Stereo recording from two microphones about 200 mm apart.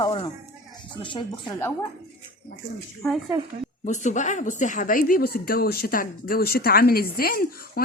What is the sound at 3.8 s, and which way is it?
Speech, 35° left (ahead or behind).